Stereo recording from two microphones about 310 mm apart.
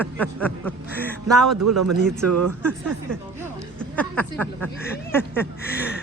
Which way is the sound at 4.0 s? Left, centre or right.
Centre.